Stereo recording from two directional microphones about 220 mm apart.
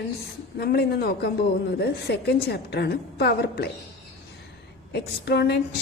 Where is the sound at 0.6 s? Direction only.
45° left (ahead or behind).